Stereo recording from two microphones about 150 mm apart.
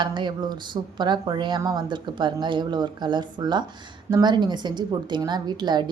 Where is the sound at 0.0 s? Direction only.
30° right (ahead or behind).